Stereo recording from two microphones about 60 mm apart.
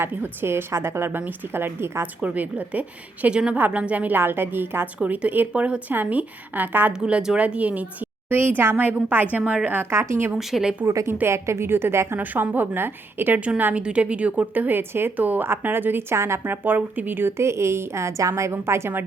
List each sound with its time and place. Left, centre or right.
0.1 s a woman's voice: right
2.2 s a woman's voice: right
4.2 s a woman's voice: right
4.9 s a woman's voice: right
7.0 s speech: centre
7.3 s a woman's voice: right
8.3 s a woman's voice: right
9.9 s a woman's voice: right
10.3 s speech: centre
10.8 s a woman's voice: right
11.1 s a woman's voice: right
12.2 s a woman's voice: right
13.7 s a woman's voice: right
16.5 s a woman's voice: right